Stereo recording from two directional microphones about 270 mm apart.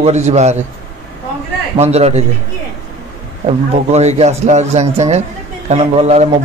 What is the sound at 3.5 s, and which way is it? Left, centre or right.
A man's voice, right.